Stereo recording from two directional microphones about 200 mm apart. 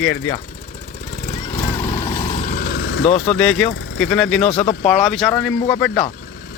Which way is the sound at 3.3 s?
5° left (ahead or behind).